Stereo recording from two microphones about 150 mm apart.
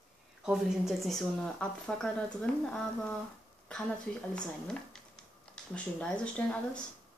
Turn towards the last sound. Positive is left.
turn(degrees=5)  # may be behind; listen again after turning